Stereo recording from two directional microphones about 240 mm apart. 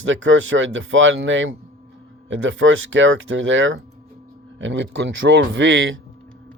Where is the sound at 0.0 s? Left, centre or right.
Right.